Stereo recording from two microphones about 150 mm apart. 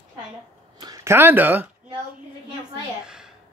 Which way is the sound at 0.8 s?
20° right (ahead or behind).